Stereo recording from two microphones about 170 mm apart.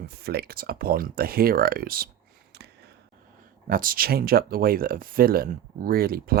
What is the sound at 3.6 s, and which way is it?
Speech, 55° right (ahead or behind).